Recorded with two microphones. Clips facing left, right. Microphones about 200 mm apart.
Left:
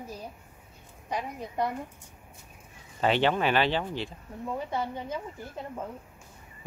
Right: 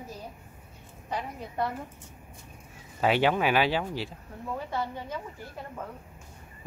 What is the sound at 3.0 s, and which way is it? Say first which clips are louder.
Speech: right 1 dB; 5° right (ahead or behind).